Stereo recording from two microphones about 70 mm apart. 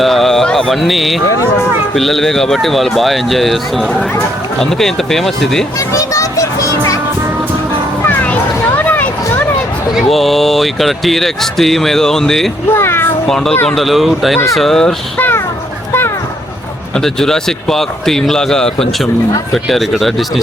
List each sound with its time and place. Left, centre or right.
0.0 s mantra: centre
2.0 s speech: centre
5.9 s music: left
8.1 s a sound: left
9.9 s speech: centre
12.7 s a sound: left
13.2 s speech: centre
15.9 s a sound: left
17.0 s speech: centre